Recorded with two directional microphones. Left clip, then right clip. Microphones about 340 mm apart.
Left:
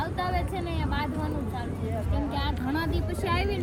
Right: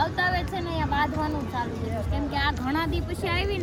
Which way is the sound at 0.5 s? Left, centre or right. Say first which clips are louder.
Right 5 dB; centre.